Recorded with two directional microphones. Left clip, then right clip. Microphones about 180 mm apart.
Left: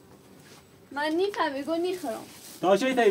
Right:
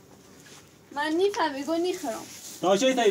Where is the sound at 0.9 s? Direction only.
15° left (ahead or behind).